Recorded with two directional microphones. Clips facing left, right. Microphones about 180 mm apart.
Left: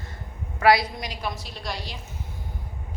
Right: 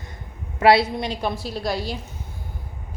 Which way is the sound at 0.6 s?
25° right (ahead or behind).